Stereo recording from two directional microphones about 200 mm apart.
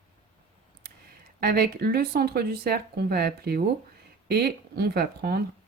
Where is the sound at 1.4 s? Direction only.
50° right (ahead or behind).